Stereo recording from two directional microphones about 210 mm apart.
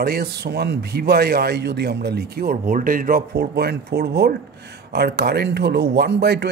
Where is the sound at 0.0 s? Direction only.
45° right (ahead or behind).